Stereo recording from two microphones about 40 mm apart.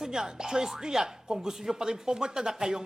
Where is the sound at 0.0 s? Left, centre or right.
Centre.